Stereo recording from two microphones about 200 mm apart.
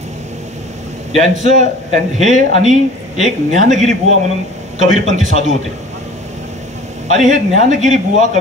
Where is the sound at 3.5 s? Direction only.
40° right (ahead or behind).